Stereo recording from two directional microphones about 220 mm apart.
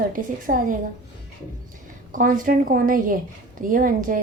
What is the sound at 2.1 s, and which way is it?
A woman's voice, 35° right (ahead or behind).